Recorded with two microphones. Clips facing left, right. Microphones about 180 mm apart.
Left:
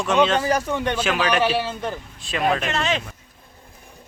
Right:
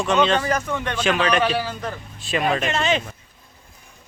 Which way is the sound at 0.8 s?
5° left (ahead or behind).